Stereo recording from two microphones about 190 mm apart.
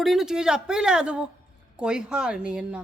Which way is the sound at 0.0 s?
Centre (ahead or behind).